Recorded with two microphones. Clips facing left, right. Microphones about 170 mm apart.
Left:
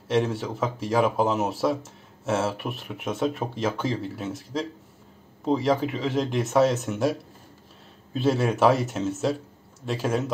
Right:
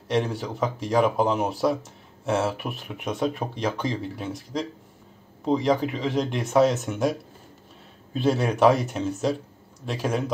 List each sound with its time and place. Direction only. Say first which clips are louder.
0.1 s speech: left 1 dB; centre (ahead or behind)